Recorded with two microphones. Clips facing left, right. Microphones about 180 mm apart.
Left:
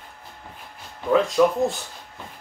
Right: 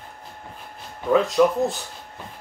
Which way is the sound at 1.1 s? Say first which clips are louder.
Even; centre (ahead or behind).